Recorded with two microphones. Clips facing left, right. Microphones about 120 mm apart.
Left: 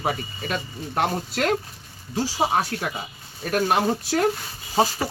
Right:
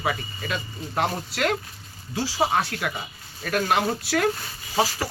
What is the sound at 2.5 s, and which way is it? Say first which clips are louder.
Speech: left 1 dB; 25° left (ahead or behind).